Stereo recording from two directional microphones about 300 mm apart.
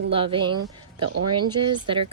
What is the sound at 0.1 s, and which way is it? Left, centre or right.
A woman's voice, centre.